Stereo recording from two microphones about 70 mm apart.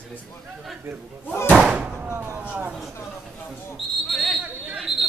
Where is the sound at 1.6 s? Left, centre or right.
Centre.